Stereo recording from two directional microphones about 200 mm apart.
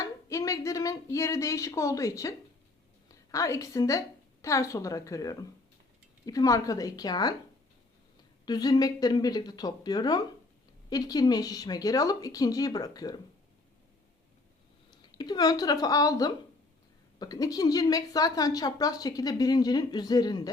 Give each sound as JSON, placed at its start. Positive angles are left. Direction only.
{"t": 0.0, "sound": "a woman's voice", "side_deg": 15}
{"t": 8.4, "sound": "a woman's voice", "side_deg": 20}
{"t": 14.8, "sound": "a woman's voice", "side_deg": 20}